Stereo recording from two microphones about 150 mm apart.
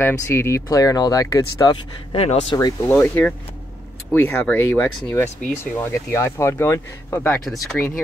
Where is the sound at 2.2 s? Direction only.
45° left (ahead or behind).